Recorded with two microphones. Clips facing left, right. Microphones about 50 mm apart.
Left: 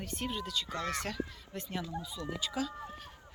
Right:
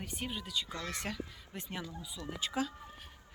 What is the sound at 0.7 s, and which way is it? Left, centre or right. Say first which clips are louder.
Speech: left 5 dB; left.